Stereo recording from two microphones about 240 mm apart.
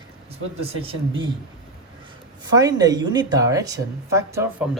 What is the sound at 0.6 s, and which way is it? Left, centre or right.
Speech, right.